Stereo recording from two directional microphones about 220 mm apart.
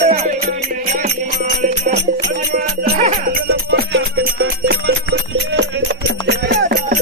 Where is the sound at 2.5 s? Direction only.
35° right (ahead or behind).